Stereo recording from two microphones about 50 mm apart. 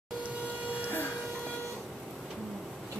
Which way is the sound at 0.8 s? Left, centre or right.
Left.